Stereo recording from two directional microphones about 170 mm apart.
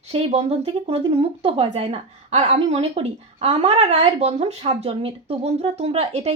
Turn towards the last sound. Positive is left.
turn(degrees=-40)  # may be behind; listen again after turning